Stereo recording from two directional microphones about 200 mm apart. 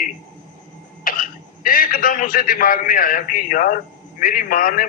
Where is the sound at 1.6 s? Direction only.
45° left (ahead or behind).